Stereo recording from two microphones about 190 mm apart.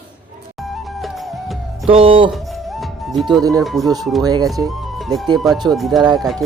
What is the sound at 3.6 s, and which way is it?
Speech, centre (ahead or behind).